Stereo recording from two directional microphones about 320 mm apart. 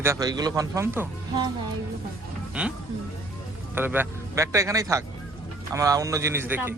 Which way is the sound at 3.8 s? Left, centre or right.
Centre.